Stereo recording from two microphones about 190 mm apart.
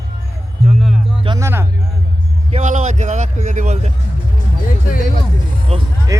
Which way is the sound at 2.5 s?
40° right (ahead or behind).